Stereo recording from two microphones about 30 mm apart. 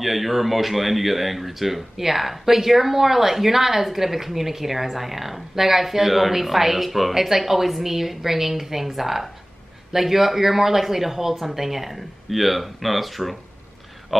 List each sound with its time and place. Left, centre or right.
0.0 s speech: centre